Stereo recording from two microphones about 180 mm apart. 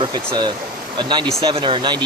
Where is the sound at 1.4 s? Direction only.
25° right (ahead or behind).